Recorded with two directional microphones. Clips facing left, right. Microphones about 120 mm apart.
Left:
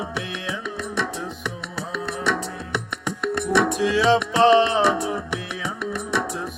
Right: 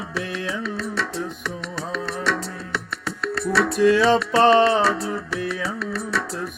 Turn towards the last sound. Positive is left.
turn(degrees=15)  # may be behind; listen again after turning